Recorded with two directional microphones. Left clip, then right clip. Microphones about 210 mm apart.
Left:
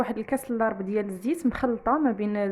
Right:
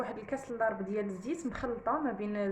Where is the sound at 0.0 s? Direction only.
50° left (ahead or behind).